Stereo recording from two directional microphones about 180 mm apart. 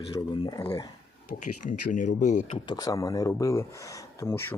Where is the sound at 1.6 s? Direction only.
45° left (ahead or behind).